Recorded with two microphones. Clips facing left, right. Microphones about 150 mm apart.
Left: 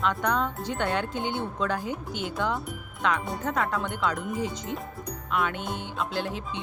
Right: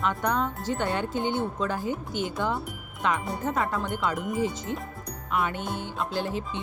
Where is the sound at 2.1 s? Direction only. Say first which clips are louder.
Right 2 dB; 50° right (ahead or behind).